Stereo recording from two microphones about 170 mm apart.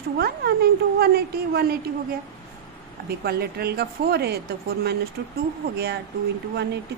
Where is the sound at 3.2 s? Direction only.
65° right (ahead or behind).